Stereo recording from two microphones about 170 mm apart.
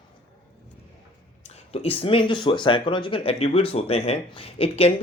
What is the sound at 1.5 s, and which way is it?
Speech, 35° left (ahead or behind).